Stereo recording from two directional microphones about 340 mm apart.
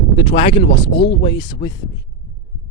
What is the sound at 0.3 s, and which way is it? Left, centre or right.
Speech, centre.